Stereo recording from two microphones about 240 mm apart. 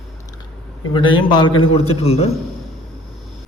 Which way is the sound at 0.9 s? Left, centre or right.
Centre.